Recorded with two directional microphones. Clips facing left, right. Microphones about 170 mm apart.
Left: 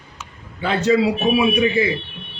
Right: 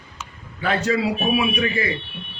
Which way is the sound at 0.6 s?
25° left (ahead or behind).